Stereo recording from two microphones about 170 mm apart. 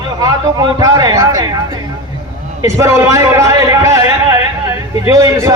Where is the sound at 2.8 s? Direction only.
20° right (ahead or behind).